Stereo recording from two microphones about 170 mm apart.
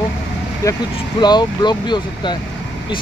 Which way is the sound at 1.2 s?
25° left (ahead or behind).